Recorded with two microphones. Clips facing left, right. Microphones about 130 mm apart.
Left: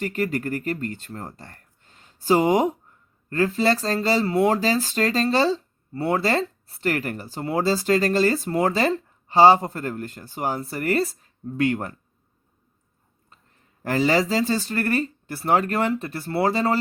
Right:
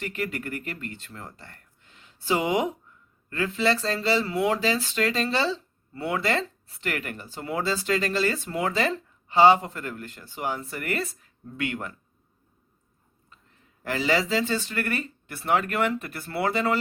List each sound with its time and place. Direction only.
0.0 s speech: 40° left (ahead or behind)
13.8 s speech: 40° left (ahead or behind)